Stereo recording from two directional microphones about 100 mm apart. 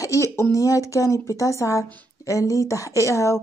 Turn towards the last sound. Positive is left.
turn(degrees=30)  # may be behind; listen again after turning